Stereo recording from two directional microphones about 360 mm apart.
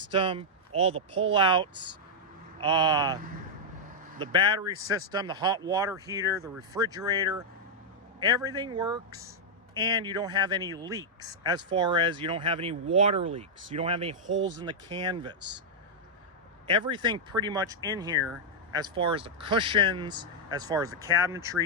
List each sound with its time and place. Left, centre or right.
0.1 s speech: centre
4.2 s speech: centre
14.3 s speech: right
14.6 s speech: centre
16.6 s speech: centre